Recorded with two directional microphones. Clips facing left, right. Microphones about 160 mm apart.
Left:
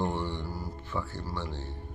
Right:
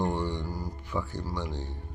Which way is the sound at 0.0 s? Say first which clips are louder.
Right 2 dB; 15° right (ahead or behind).